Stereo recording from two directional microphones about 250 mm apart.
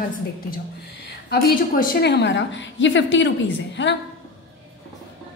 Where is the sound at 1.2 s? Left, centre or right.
Left.